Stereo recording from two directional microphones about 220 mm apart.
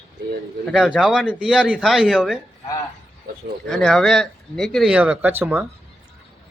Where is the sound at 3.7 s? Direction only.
5° left (ahead or behind).